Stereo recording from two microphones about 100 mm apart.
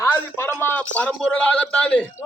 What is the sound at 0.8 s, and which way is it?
A man's voice, 15° left (ahead or behind).